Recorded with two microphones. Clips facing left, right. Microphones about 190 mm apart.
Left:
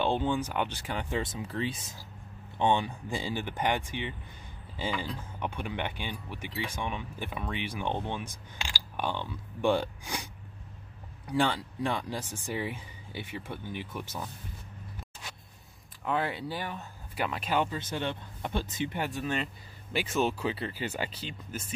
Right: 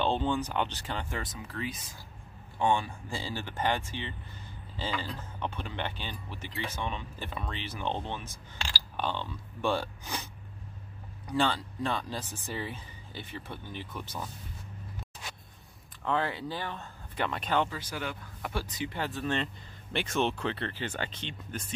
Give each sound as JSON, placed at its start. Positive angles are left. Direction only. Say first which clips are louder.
{"t": 0.0, "sound": "speech", "louder": "left 1 dB", "side_deg": 10}
{"t": 1.2, "sound": "speech", "louder": "left 4 dB", "side_deg": 25}
{"t": 16.0, "sound": "speech", "louder": "even", "side_deg": 15}
{"t": 17.6, "sound": "speech", "louder": "left 4 dB", "side_deg": 25}